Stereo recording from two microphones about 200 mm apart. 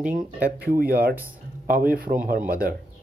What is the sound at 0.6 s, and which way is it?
Speech, 45° right (ahead or behind).